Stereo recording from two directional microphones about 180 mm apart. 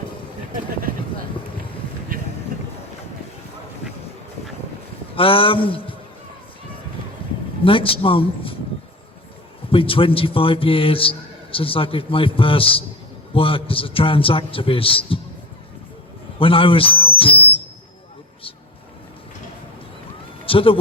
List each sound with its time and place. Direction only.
2.1 s vehicle: 50° right (ahead or behind)
5.1 s a man's voice: 30° left (ahead or behind)
7.6 s a man's voice: 30° left (ahead or behind)
9.6 s a man's voice: 30° left (ahead or behind)
16.4 s a sound: 30° left (ahead or behind)
20.4 s a sound: 30° left (ahead or behind)